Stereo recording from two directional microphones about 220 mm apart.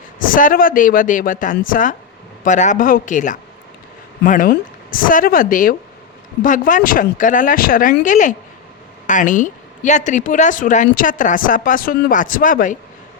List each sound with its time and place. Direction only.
0.2 s speech: 40° left (ahead or behind)